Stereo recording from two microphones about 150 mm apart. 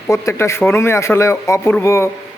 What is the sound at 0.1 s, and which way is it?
A man's voice, 20° left (ahead or behind).